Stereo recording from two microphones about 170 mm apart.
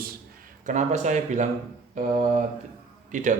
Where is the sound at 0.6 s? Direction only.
45° right (ahead or behind).